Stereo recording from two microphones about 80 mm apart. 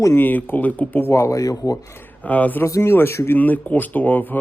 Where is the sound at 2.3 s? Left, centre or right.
Centre.